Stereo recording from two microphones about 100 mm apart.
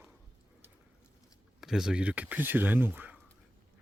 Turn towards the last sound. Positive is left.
turn(degrees=-15)  # may be behind; listen again after turning